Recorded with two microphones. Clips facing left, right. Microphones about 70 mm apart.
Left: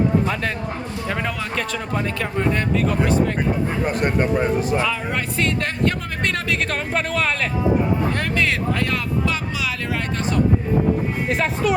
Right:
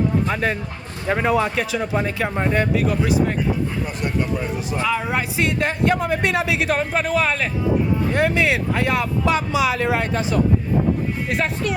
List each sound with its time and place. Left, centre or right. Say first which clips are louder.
1.0 s speech: right 9 dB; centre
2.7 s speech: even; centre
4.0 s a man's voice: left 3 dB; left
4.9 s speech: right 2 dB; centre
8.1 s speech: right 3 dB; centre
11.3 s speech: left 2 dB; centre